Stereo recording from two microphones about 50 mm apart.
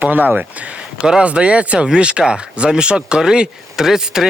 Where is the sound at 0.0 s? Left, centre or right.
Right.